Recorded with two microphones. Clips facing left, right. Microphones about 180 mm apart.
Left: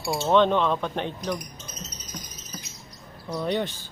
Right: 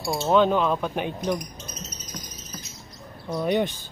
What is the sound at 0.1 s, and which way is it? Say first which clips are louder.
Speech: even; 5° right (ahead or behind).